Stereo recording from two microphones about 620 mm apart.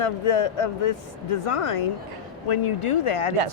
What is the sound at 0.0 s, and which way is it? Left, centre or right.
Speech, left.